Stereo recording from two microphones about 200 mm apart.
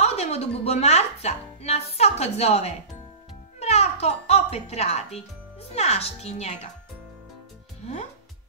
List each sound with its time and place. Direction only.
0.0 s speech: 30° left (ahead or behind)
3.5 s music: 30° left (ahead or behind)
5.7 s a child's voice: 30° left (ahead or behind)